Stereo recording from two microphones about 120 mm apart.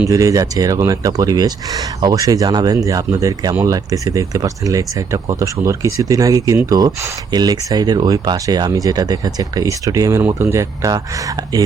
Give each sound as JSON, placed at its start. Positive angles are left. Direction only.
{"t": 0.1, "sound": "speech", "side_deg": -30}